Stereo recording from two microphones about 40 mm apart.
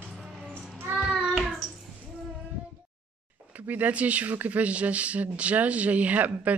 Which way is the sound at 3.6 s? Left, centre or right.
Right.